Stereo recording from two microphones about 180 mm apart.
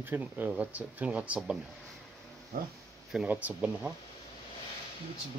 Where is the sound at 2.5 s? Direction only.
55° right (ahead or behind).